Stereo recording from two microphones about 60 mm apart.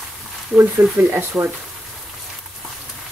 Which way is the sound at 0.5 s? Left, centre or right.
Centre.